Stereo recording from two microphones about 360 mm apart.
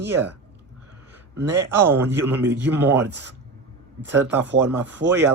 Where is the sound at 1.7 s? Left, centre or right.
Centre.